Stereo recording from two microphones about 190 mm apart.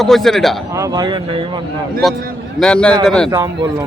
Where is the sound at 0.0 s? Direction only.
Centre (ahead or behind).